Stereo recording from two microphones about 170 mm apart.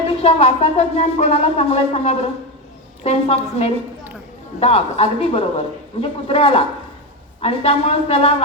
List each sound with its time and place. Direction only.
0.2 s speech: 35° left (ahead or behind)